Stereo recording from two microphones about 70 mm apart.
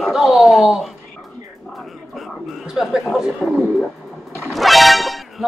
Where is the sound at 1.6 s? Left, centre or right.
Centre.